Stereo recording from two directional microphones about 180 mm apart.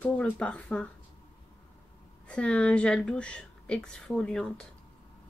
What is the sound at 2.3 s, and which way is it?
A woman's voice, 5° left (ahead or behind).